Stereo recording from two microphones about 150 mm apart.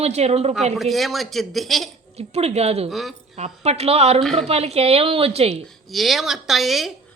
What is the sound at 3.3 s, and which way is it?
Speech, 45° right (ahead or behind).